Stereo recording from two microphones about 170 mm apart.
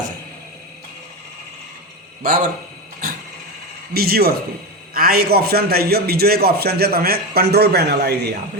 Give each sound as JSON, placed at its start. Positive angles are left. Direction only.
{"t": 2.2, "sound": "a man's voice", "side_deg": -60}
{"t": 3.9, "sound": "a man's voice", "side_deg": -65}